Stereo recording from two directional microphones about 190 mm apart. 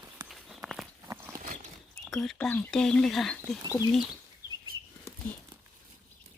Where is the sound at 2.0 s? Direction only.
Centre (ahead or behind).